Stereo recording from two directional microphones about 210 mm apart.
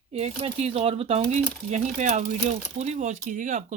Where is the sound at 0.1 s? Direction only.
30° right (ahead or behind).